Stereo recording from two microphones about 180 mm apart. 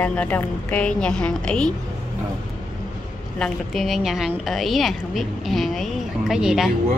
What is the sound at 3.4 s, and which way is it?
A woman's voice, centre (ahead or behind).